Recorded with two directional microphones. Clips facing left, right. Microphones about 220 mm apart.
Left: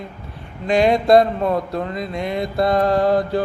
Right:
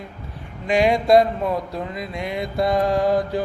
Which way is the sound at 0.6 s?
10° right (ahead or behind).